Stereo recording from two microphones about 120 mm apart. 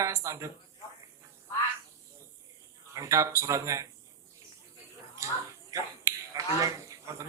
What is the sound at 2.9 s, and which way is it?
Speech, 25° right (ahead or behind).